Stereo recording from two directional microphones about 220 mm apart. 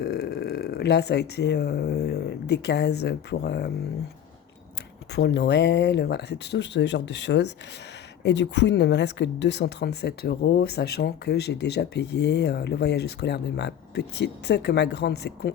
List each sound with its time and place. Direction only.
0.0 s speech: 45° left (ahead or behind)
5.1 s speech: 50° left (ahead or behind)